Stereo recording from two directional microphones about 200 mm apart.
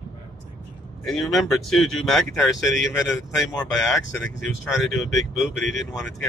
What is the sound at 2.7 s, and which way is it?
Speech, 65° left (ahead or behind).